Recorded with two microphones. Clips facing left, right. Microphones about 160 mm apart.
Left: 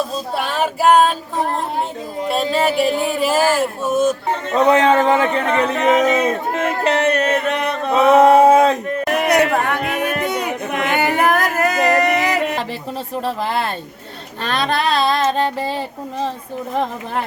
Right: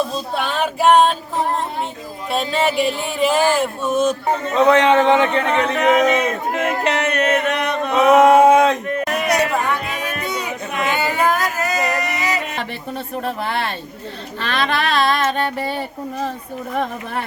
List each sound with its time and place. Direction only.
0.3 s female singing: 5° left (ahead or behind)
2.3 s speech: centre (ahead or behind)
4.5 s music: 35° left (ahead or behind)
5.0 s speech: 5° left (ahead or behind)
5.9 s music: 30° left (ahead or behind)
8.2 s speech: 35° left (ahead or behind)
9.0 s a sound: 60° left (ahead or behind)
13.2 s music: 35° left (ahead or behind)